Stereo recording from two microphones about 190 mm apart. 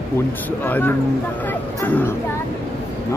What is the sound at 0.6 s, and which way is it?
Speech, 10° left (ahead or behind).